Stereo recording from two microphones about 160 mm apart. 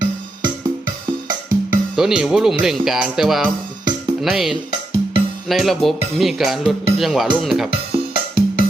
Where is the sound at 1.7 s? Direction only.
5° right (ahead or behind).